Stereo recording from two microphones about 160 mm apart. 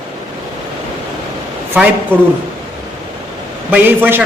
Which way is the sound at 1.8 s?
10° right (ahead or behind).